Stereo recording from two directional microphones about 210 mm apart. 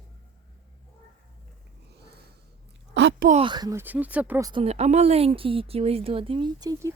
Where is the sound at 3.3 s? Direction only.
25° right (ahead or behind).